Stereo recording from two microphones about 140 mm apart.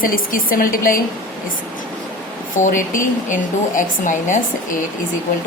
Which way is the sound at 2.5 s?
70° left (ahead or behind).